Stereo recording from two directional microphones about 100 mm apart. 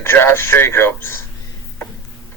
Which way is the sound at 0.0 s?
25° left (ahead or behind).